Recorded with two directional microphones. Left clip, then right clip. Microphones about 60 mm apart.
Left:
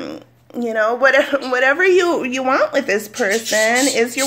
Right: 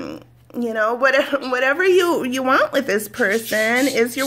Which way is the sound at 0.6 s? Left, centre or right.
Right.